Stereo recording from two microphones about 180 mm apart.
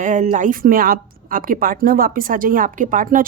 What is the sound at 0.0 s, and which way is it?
A woman's voice, 45° right (ahead or behind).